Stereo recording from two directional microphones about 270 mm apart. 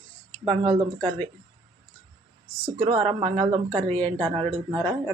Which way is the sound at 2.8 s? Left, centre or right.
Right.